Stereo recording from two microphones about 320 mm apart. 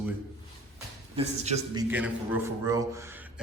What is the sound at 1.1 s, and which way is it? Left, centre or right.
Speech, centre.